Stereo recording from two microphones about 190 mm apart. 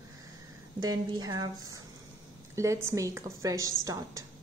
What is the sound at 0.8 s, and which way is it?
A woman's voice, 20° right (ahead or behind).